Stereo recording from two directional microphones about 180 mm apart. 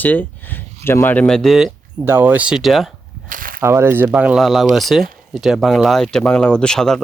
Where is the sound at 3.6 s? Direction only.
15° right (ahead or behind).